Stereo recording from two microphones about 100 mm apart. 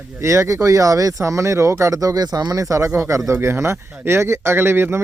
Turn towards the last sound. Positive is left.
turn(degrees=-25)  # may be behind; listen again after turning